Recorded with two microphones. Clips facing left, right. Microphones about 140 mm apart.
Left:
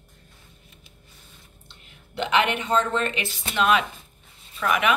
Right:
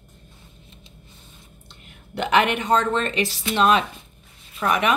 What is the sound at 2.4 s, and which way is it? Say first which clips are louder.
Speech: right 3 dB; 40° right (ahead or behind).